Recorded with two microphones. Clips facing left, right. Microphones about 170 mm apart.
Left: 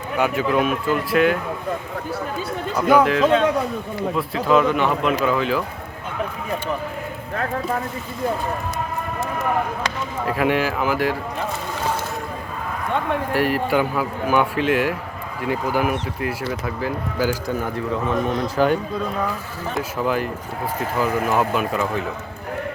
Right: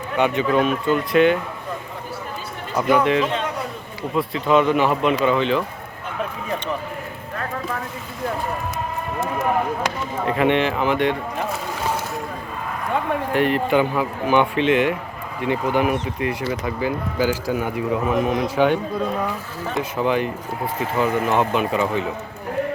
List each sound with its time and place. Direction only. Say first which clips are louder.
0.2 s speech: right 1 dB; 5° left (ahead or behind)
2.7 s speech: left 1 dB; centre (ahead or behind)
10.2 s speech: right 2 dB; 5° left (ahead or behind)
13.3 s a man's voice: right 2 dB; 5° left (ahead or behind)